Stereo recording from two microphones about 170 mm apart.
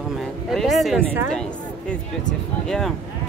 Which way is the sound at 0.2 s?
Centre (ahead or behind).